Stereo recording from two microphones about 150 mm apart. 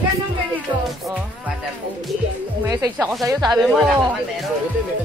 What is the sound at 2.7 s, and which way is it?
Speech, 25° right (ahead or behind).